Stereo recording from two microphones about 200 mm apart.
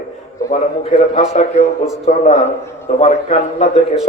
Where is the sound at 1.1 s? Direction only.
35° left (ahead or behind).